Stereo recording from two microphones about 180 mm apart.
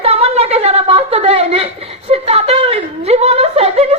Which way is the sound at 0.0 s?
35° right (ahead or behind).